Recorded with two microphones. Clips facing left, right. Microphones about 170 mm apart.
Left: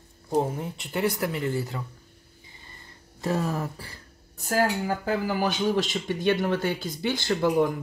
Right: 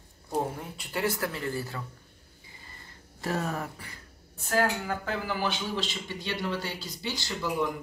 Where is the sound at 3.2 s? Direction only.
30° left (ahead or behind); by 7.7 s 50° left (ahead or behind).